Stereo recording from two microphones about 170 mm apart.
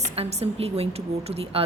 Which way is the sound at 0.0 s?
40° right (ahead or behind).